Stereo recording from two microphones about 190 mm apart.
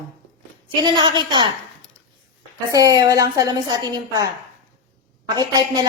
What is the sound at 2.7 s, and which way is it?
A woman's voice, 20° right (ahead or behind).